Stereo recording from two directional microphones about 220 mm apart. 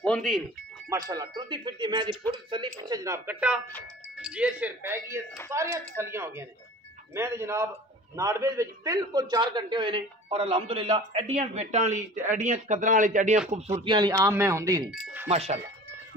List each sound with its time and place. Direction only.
0.0 s speech: 5° left (ahead or behind)
0.8 s a man's voice: 15° right (ahead or behind)
15.2 s a man's voice: 30° right (ahead or behind)